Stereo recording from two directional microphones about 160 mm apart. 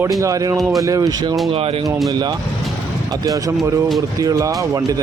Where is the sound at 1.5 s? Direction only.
35° right (ahead or behind).